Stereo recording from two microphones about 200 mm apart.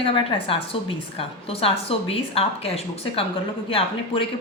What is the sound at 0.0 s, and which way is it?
A woman's voice, 25° left (ahead or behind).